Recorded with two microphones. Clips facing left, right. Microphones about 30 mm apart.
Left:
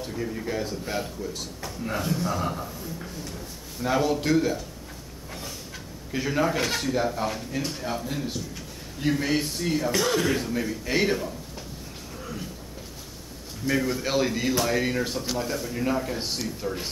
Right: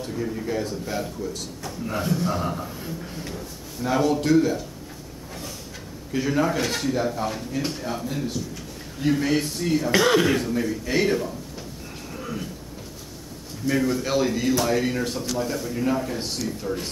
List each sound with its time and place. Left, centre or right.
0.0 s a man's voice: centre
2.0 s a man's voice: centre
3.8 s a man's voice: centre
6.1 s a man's voice: centre
9.8 s speech: right
10.3 s a man's voice: centre
13.7 s a man's voice: centre